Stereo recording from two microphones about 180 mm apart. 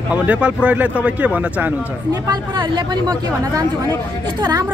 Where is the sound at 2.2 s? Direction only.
25° right (ahead or behind).